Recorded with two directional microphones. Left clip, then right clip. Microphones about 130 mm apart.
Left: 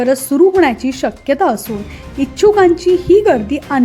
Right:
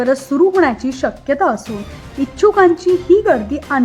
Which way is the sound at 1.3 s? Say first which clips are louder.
Left 2 dB; 30° left (ahead or behind).